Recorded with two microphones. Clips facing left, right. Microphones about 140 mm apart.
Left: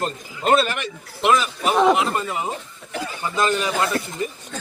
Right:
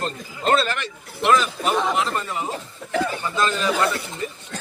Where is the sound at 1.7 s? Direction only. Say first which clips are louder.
Left 8 dB; 60° left (ahead or behind).